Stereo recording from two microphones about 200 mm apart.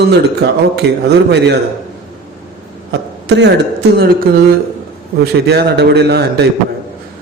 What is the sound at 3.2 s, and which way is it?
A man's voice, 60° right (ahead or behind).